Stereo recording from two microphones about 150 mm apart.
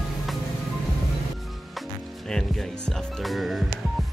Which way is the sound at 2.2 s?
5° left (ahead or behind).